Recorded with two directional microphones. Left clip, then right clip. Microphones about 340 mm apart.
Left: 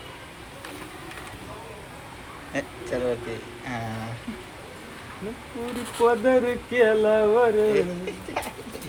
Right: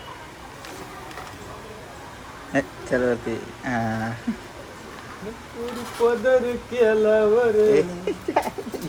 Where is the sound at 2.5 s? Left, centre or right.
Right.